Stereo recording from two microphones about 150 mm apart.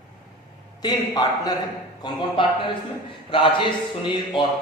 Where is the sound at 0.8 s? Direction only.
25° left (ahead or behind).